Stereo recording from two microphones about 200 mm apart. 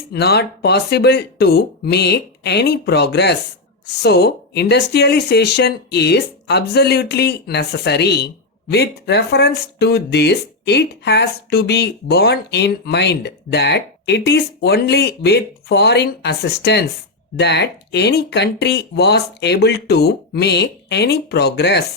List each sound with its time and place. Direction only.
0.1 s speech: 55° left (ahead or behind)